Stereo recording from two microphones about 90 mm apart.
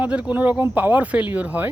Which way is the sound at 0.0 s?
15° right (ahead or behind).